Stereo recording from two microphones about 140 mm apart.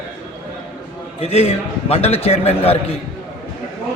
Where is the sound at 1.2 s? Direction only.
45° left (ahead or behind).